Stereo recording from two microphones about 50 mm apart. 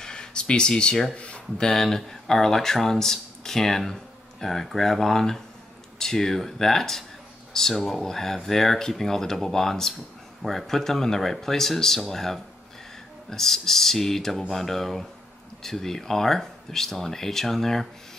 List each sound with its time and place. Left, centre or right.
0.0 s a sound: centre
1.1 s speech: left
1.7 s speech: centre